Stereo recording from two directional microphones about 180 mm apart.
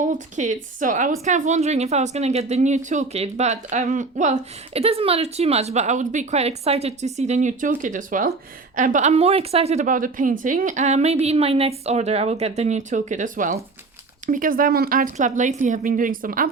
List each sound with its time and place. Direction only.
0.0 s a woman's voice: 45° right (ahead or behind)